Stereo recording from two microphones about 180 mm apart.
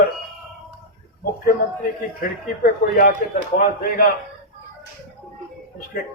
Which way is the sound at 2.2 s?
55° left (ahead or behind).